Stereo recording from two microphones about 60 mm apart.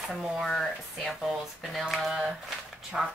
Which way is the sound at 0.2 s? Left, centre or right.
Centre.